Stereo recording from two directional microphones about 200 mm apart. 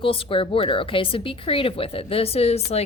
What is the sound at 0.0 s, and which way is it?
A woman's voice, 25° left (ahead or behind).